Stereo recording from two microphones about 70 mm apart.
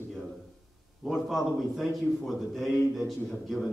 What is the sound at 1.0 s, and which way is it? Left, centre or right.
A man's voice, centre.